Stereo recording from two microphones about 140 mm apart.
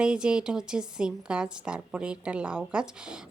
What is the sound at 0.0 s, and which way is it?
A woman's voice, 5° right (ahead or behind).